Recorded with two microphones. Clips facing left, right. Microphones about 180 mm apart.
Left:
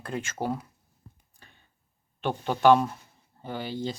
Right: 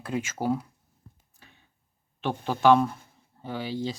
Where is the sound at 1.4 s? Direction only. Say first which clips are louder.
Right 1 dB; 5° right (ahead or behind).